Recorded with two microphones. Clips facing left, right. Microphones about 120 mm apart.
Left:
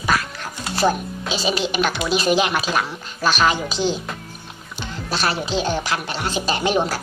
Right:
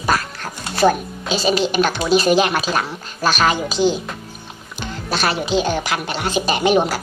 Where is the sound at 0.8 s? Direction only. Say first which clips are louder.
Right 4 dB; 50° right (ahead or behind).